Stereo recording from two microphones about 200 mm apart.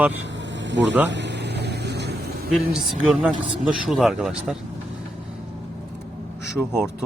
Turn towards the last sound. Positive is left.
turn(degrees=-5)  # may be behind; listen again after turning